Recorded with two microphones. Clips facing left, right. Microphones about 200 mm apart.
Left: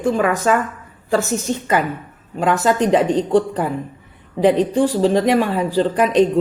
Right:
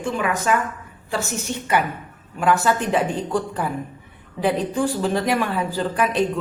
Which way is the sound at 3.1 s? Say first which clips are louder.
Left 8 dB; 90° left.